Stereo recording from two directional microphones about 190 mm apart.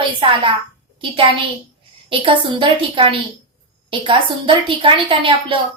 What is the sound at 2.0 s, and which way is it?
A woman's voice, 25° right (ahead or behind).